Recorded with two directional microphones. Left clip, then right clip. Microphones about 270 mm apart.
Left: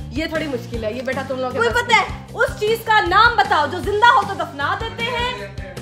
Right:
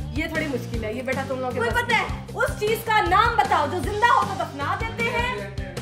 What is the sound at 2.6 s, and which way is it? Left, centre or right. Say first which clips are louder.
A woman's voice: left 5 dB; centre.